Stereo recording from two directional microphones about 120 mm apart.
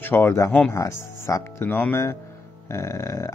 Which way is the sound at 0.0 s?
20° left (ahead or behind).